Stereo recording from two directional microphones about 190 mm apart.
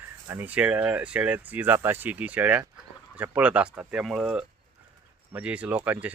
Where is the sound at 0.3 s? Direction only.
10° right (ahead or behind).